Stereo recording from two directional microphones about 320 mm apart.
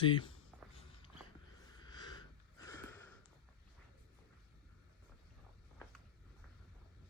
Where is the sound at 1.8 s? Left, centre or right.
Centre.